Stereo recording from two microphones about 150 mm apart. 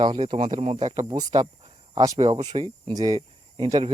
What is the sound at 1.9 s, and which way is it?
Speech, 20° right (ahead or behind).